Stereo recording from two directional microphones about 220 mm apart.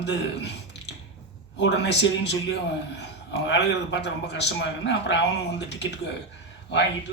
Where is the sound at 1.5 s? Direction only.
50° left (ahead or behind).